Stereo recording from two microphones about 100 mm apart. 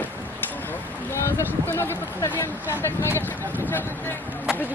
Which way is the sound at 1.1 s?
25° left (ahead or behind).